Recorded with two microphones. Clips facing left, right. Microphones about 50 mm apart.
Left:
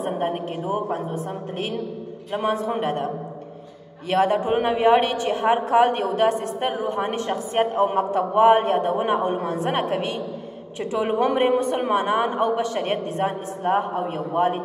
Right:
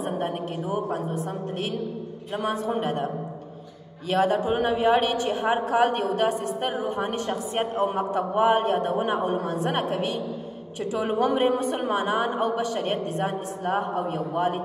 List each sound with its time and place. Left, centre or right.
0.0 s a sound: left
2.3 s a woman's voice: left
4.1 s a woman's voice: left
6.2 s a woman's voice: left
8.0 s a woman's voice: left